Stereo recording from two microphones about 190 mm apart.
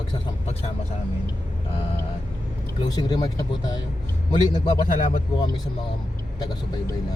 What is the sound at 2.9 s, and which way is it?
Speech, 20° left (ahead or behind).